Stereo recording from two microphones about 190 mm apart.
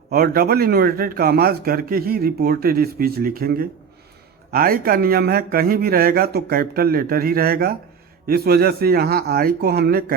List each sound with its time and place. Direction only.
0.1 s a man's voice: 50° right (ahead or behind)